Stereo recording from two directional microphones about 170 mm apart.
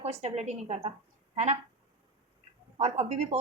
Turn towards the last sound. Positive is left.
turn(degrees=-40)  # may be behind; listen again after turning